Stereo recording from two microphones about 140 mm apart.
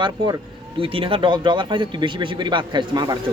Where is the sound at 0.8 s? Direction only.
40° right (ahead or behind).